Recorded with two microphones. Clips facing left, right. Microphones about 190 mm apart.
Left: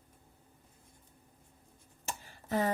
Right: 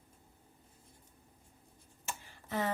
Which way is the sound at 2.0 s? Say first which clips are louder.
Left 3 dB; 40° left (ahead or behind).